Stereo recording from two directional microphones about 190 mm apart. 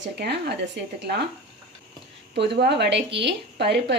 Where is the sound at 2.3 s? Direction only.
65° right (ahead or behind).